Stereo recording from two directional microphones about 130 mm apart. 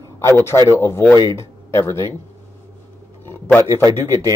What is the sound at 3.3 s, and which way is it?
Speech, 15° left (ahead or behind).